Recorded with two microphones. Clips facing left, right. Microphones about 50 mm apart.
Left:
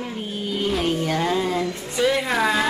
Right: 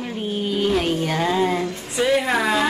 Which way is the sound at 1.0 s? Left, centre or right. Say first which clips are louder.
Right 2 dB; right.